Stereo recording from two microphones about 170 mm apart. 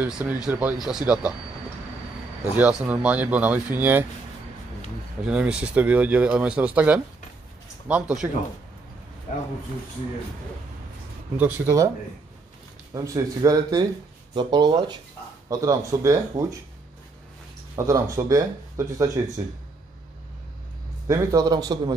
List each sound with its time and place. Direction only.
0.0 s speech: 5° right (ahead or behind)
2.5 s speech: 10° right (ahead or behind)
5.2 s speech: 5° right (ahead or behind)
11.3 s speech: 10° right (ahead or behind)
12.9 s speech: 20° right (ahead or behind)
17.7 s speech: 15° right (ahead or behind)
21.1 s speech: 20° right (ahead or behind)